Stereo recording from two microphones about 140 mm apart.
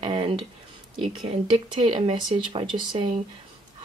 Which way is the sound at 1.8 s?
40° right (ahead or behind).